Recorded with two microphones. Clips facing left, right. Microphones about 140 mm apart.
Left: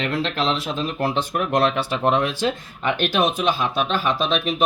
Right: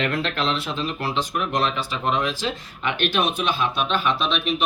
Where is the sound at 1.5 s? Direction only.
60° left (ahead or behind).